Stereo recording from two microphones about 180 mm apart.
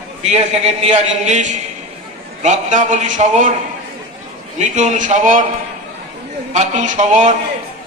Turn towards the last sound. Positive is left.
turn(degrees=-40)  # may be behind; listen again after turning